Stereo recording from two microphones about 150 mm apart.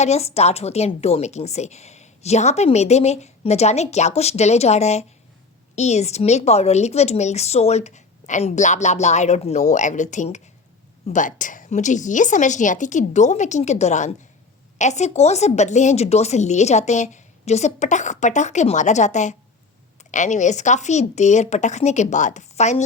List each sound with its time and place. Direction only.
0.0 s a woman's voice: 45° left (ahead or behind)